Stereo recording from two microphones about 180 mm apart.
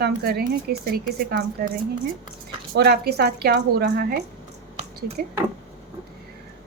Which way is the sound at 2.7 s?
65° right (ahead or behind).